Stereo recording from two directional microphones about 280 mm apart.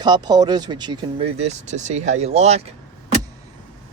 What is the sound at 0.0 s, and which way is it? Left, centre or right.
Speech, centre.